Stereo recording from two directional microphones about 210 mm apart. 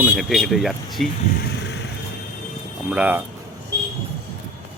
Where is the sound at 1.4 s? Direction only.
55° left (ahead or behind).